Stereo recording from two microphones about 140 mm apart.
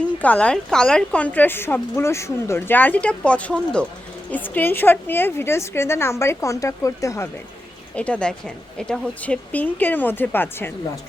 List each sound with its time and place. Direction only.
0.0 s a woman's voice: 10° left (ahead or behind)
7.9 s a woman's voice: 10° left (ahead or behind)